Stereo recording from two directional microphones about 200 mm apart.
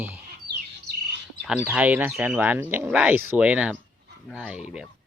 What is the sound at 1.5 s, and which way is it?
Speech, 5° right (ahead or behind).